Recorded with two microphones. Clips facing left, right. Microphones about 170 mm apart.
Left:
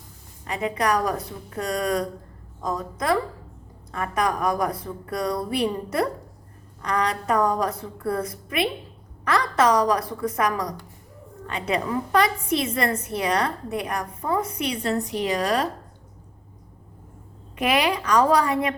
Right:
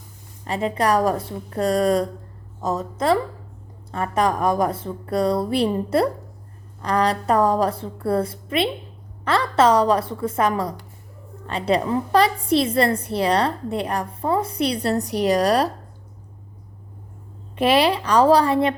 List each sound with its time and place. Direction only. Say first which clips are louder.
0.4 s a woman's voice: right 3 dB; 30° right (ahead or behind)
17.6 s a woman's voice: right 5 dB; 30° right (ahead or behind)